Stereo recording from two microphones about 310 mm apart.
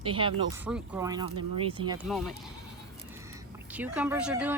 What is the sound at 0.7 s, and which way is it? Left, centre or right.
Speech, centre.